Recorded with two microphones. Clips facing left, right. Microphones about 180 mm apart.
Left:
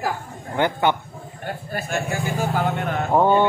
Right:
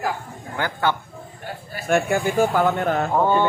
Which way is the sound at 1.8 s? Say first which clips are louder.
Right 7 dB; 55° right (ahead or behind).